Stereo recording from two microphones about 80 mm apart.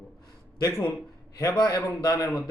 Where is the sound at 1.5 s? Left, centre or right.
Left.